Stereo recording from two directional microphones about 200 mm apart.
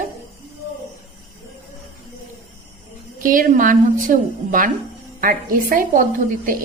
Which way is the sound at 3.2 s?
45° right (ahead or behind).